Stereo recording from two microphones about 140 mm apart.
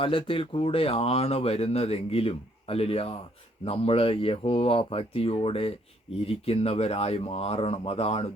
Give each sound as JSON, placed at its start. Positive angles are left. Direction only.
{"t": 0.0, "sound": "speech", "side_deg": 40}